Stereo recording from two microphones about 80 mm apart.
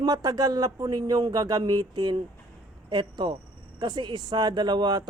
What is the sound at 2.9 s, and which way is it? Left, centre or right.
Speech, right.